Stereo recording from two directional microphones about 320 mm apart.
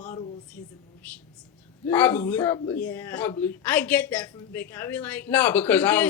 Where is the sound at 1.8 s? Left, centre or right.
Centre.